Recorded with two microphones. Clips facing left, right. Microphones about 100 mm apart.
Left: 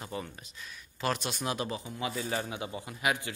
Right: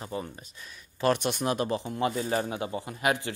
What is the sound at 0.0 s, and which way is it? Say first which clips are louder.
Speech: right 3 dB; 25° right (ahead or behind).